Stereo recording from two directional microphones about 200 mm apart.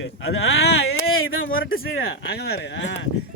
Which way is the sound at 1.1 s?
90° left.